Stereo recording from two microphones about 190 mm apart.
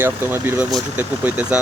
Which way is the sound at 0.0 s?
10° right (ahead or behind).